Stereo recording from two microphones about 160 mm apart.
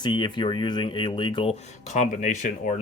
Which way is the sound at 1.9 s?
50° left (ahead or behind).